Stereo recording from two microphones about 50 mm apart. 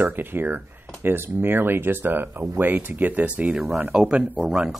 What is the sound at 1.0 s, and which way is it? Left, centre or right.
Speech, right.